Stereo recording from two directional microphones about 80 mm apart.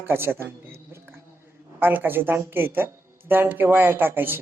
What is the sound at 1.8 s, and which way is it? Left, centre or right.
Speech, right.